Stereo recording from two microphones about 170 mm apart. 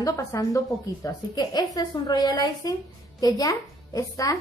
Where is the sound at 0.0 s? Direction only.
20° left (ahead or behind).